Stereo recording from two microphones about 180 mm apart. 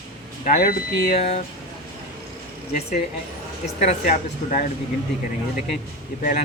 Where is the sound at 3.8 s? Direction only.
40° left (ahead or behind).